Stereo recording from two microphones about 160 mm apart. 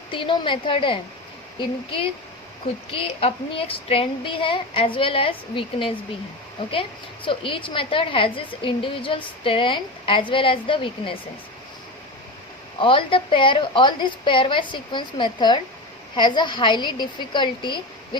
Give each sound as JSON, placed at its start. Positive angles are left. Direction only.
{"t": 0.1, "sound": "a woman's voice", "side_deg": 30}
{"t": 7.3, "sound": "a woman's voice", "side_deg": 30}
{"t": 12.8, "sound": "a woman's voice", "side_deg": 30}